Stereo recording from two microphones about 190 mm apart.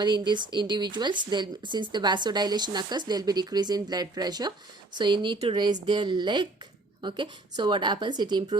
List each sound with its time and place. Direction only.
0.0 s speech: 25° right (ahead or behind)